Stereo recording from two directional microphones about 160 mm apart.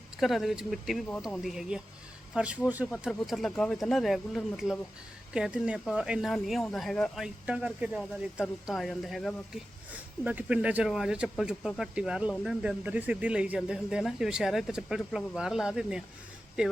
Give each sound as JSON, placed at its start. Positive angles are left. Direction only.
{"t": 0.2, "sound": "speech", "side_deg": 0}
{"t": 9.9, "sound": "speech", "side_deg": -10}